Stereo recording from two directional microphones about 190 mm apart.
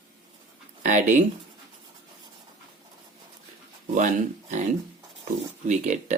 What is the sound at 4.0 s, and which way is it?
Speech, 40° right (ahead or behind).